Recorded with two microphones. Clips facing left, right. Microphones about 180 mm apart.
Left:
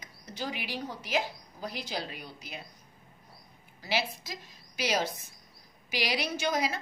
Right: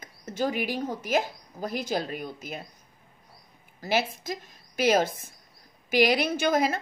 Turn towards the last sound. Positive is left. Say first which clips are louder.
# right 6 dB
turn(degrees=-50)  # may be behind; listen again after turning